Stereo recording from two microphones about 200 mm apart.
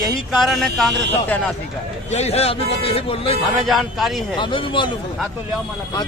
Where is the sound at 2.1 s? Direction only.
30° left (ahead or behind).